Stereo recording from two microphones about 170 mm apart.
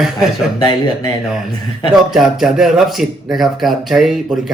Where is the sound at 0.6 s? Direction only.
25° left (ahead or behind).